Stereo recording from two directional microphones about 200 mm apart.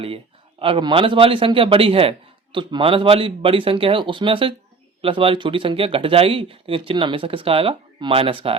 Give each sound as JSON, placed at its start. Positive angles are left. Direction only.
{"t": 0.6, "sound": "a man's voice", "side_deg": -25}